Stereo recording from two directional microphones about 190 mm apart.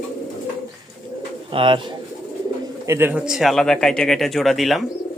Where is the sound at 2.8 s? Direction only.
15° right (ahead or behind).